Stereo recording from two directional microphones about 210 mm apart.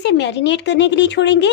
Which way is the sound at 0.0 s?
55° left (ahead or behind).